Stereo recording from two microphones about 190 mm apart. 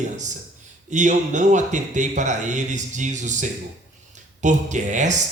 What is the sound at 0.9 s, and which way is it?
Speech, 40° right (ahead or behind).